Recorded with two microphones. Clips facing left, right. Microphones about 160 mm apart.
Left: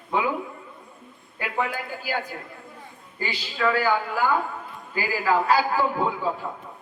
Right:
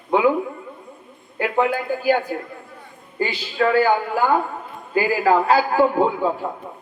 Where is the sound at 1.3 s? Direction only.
60° right (ahead or behind).